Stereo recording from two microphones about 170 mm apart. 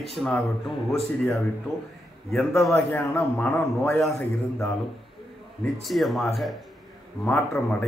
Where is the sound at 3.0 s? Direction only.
15° left (ahead or behind).